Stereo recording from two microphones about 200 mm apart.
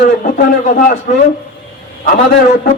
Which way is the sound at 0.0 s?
45° left (ahead or behind).